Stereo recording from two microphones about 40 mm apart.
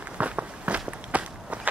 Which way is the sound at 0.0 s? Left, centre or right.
Right.